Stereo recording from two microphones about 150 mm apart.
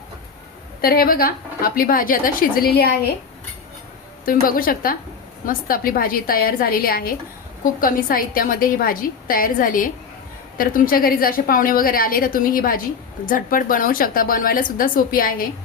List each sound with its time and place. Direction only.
0.8 s a woman's voice: 80° left
4.3 s a woman's voice: 70° left (ahead or behind)